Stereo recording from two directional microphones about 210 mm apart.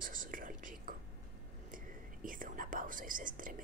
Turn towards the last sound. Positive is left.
turn(degrees=-40)  # may be behind; listen again after turning